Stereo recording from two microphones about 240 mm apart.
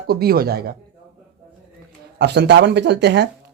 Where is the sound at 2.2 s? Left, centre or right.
Right.